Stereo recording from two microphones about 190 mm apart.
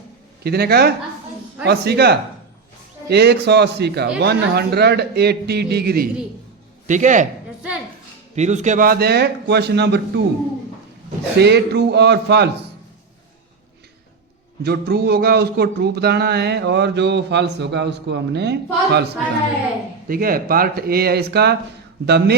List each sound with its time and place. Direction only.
0.4 s speech: 55° right (ahead or behind)
6.8 s a man's voice: 40° right (ahead or behind)
8.4 s speech: 40° right (ahead or behind); by 10.2 s 60° right (ahead or behind)
11.3 s speech: 60° right (ahead or behind)
14.6 s speech: 55° right (ahead or behind)
20.1 s speech: 50° right (ahead or behind)